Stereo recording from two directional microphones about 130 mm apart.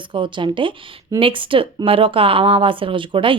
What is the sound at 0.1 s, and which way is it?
Speech, 40° right (ahead or behind).